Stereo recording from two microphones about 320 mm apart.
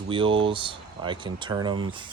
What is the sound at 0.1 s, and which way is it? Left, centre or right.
Speech, centre.